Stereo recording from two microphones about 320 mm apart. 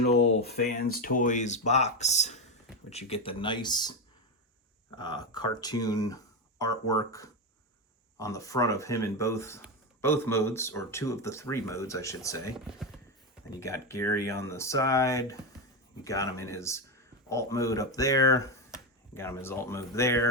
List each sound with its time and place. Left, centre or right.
0.0 s speech: left; by 3.9 s centre
4.9 s speech: centre
13.6 s speech: centre